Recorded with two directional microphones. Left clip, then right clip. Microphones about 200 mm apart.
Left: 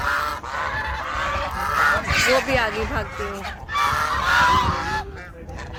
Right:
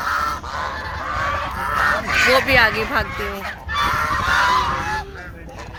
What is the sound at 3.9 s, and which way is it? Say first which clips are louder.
Honk: right 1 dB; 35° left (ahead or behind).